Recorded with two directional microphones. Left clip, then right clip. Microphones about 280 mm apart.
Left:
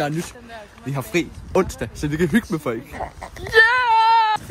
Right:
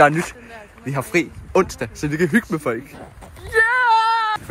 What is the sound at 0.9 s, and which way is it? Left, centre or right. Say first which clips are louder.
Speech: right 3 dB; centre.